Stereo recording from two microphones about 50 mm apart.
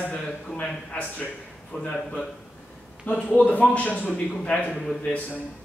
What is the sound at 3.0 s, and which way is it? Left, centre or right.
A man's voice, left.